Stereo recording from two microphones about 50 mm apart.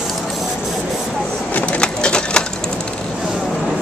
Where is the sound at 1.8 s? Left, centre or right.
Centre.